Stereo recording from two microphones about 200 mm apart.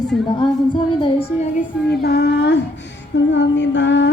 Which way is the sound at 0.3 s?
25° left (ahead or behind).